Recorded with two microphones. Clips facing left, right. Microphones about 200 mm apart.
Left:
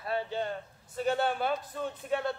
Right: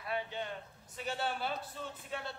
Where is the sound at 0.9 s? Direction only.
50° left (ahead or behind).